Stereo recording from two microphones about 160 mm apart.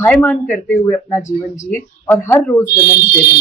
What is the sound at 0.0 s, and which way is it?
Speech, 10° left (ahead or behind).